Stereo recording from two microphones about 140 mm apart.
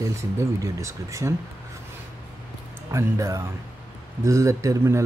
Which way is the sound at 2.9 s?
25° right (ahead or behind).